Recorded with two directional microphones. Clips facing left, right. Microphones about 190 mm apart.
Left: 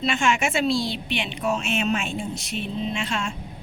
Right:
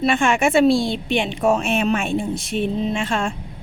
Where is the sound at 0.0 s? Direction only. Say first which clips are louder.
Right 5 dB; 55° right (ahead or behind).